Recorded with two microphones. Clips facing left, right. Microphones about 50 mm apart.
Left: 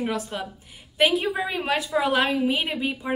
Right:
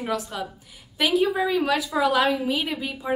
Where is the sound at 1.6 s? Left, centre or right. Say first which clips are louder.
Right 1 dB; left.